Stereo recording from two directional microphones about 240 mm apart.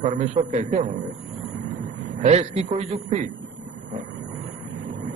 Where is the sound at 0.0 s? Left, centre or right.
Right.